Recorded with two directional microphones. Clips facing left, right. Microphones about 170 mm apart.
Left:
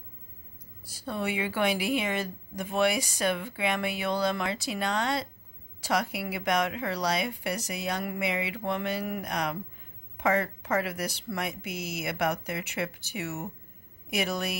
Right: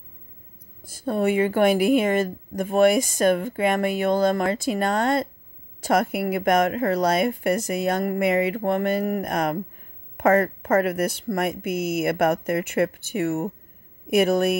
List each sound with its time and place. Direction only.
0.8 s a woman's voice: 50° right (ahead or behind)